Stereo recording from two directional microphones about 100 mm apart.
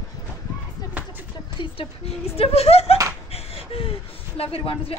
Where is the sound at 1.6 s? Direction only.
75° left (ahead or behind).